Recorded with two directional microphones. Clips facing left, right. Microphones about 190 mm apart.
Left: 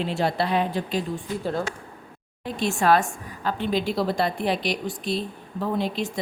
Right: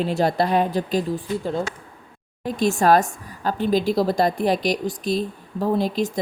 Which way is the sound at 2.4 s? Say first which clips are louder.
Right 4 dB; 40° right (ahead or behind).